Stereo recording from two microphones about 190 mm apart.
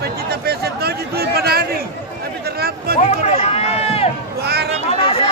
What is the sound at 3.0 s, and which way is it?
Run, 35° left (ahead or behind).